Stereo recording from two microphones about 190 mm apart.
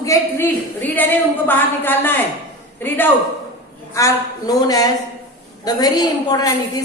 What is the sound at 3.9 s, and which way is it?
A woman's voice, 15° left (ahead or behind).